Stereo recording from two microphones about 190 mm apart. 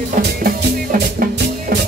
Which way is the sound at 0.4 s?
50° right (ahead or behind).